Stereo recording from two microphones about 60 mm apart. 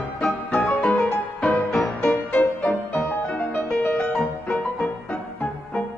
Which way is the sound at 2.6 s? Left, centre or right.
Left.